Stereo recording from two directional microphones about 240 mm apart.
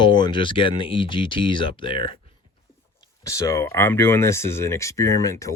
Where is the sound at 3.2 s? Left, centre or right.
Centre.